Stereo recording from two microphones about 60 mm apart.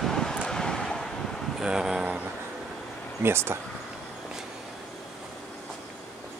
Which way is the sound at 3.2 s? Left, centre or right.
Right.